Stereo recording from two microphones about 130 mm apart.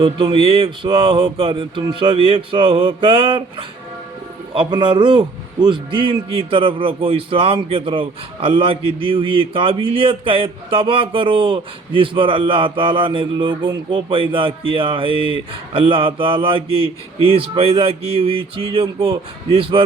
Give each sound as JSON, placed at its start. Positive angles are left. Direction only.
{"t": 0.0, "sound": "a man's voice", "side_deg": -35}
{"t": 4.7, "sound": "a man's voice", "side_deg": -35}